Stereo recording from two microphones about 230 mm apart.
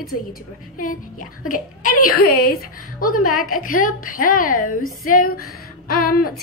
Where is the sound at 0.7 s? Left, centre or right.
Left.